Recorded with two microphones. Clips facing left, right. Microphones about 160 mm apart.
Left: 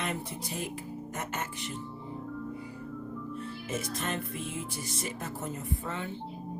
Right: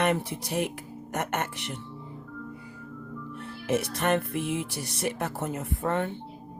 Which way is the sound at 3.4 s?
70° right (ahead or behind).